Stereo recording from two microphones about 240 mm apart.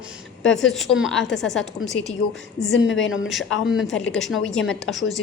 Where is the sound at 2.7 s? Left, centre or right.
Left.